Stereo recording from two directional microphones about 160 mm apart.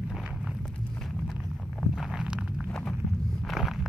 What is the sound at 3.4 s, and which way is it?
Walk, centre (ahead or behind).